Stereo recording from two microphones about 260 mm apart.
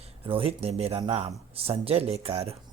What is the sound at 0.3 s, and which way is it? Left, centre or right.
Speech, right.